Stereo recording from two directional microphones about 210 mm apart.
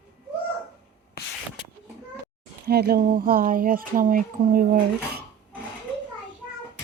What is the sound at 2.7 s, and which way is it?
Speech, 45° right (ahead or behind).